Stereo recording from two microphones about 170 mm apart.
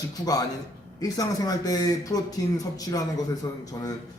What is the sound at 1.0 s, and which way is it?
Speech, 20° left (ahead or behind).